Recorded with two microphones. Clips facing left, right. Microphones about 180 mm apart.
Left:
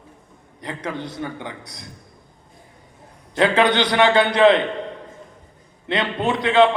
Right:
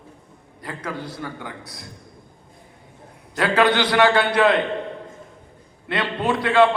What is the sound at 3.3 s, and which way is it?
A man's voice, 25° left (ahead or behind).